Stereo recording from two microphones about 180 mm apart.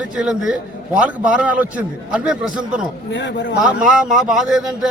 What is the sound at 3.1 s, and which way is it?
Speech, 80° left.